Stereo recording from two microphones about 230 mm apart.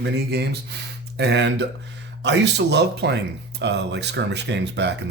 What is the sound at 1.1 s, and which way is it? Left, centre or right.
Speech, right.